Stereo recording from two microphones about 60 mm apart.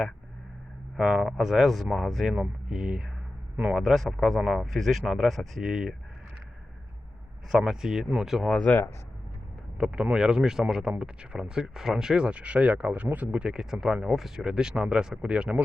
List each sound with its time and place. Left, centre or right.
0.9 s speech: centre
2.3 s speech: centre
4.4 s speech: centre
4.6 s speech: centre
7.5 s speech: centre
8.7 s speech: left
9.7 s speech: centre
13.4 s speech: centre